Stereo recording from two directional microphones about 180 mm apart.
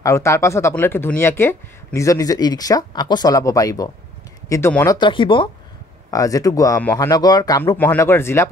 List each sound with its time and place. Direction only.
0.0 s speech: 15° left (ahead or behind)
4.9 s speech: 25° left (ahead or behind); by 7.1 s 10° left (ahead or behind)
7.1 s speech: 20° left (ahead or behind)